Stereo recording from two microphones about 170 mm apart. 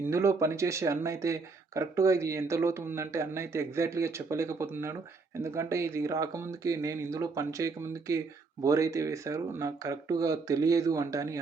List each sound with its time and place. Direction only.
0.0 s speech: 15° right (ahead or behind)